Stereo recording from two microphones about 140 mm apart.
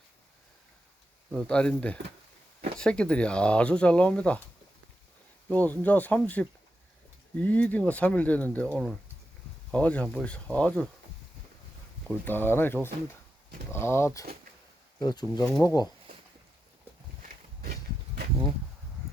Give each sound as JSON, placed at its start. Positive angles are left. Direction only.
{"t": 1.3, "sound": "speech", "side_deg": 5}
{"t": 5.5, "sound": "speech", "side_deg": 10}
{"t": 12.0, "sound": "speech", "side_deg": 15}
{"t": 15.4, "sound": "speech", "side_deg": 15}
{"t": 17.2, "sound": "a sound", "side_deg": -90}